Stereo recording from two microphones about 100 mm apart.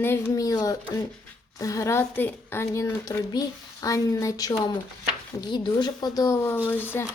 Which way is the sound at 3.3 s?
40° left (ahead or behind).